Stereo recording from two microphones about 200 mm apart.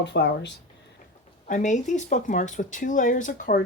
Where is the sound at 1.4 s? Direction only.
40° left (ahead or behind).